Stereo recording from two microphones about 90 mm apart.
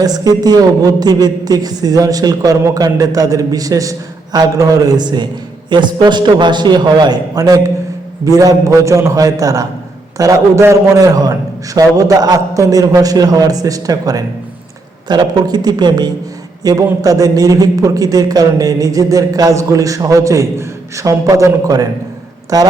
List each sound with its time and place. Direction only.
0.0 s a woman's voice: 45° right (ahead or behind)